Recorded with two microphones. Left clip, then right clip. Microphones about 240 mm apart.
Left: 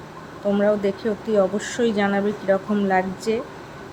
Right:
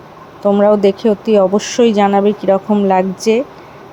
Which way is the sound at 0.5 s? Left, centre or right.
Right.